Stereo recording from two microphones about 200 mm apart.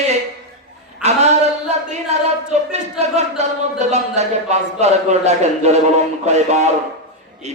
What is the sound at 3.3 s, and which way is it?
Speech, 35° right (ahead or behind).